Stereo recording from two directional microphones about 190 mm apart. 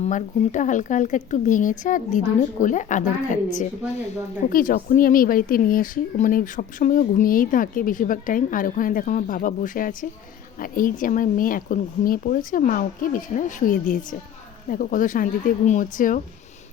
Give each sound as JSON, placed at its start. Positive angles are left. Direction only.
{"t": 0.0, "sound": "speech", "side_deg": 40}